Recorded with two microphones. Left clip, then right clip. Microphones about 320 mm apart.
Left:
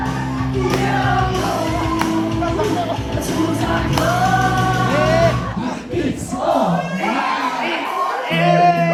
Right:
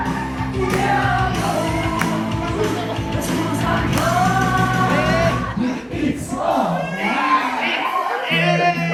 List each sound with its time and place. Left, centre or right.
8.3 s music: left